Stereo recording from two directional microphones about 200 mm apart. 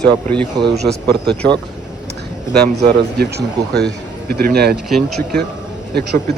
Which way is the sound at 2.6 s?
55° right (ahead or behind).